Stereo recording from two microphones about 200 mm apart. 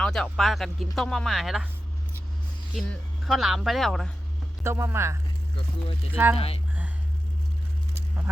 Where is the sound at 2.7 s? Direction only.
Centre (ahead or behind).